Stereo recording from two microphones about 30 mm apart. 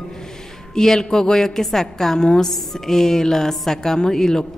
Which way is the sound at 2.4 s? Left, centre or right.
Centre.